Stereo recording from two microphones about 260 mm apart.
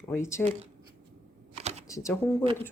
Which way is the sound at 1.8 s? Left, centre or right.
Centre.